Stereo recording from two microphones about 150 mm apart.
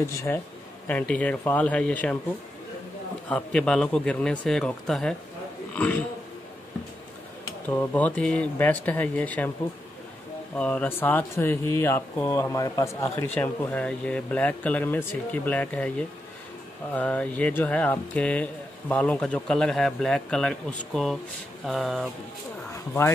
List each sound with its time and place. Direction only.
0.0 s a man's voice: 20° left (ahead or behind)
3.3 s a man's voice: 5° left (ahead or behind)
7.6 s speech: 10° left (ahead or behind)
10.5 s a man's voice: 10° left (ahead or behind)
22.7 s a sound: 15° left (ahead or behind)